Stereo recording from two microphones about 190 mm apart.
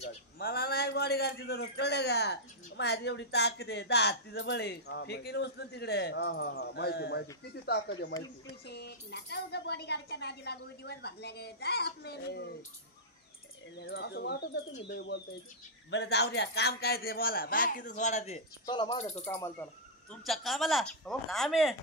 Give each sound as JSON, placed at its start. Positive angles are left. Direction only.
{"t": 0.4, "sound": "a man's voice", "side_deg": 55}
{"t": 13.7, "sound": "a man's voice", "side_deg": 65}
{"t": 15.9, "sound": "a man's voice", "side_deg": 60}
{"t": 19.2, "sound": "speech", "side_deg": 15}
{"t": 20.2, "sound": "a woman's voice", "side_deg": 0}